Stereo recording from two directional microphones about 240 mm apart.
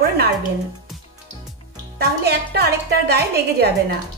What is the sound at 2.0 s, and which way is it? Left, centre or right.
A woman's voice, right.